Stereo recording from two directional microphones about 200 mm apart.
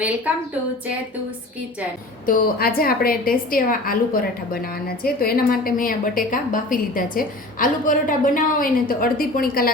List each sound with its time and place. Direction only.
2.2 s a woman's voice: 45° left (ahead or behind)